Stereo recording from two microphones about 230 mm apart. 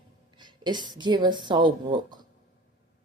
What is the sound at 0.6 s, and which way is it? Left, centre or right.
A woman's voice, centre.